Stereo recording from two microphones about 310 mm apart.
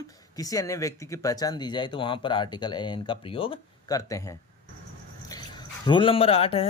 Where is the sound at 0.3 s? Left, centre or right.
Centre.